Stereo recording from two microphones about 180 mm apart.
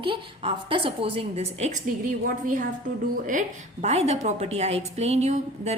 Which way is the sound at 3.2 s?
45° right (ahead or behind).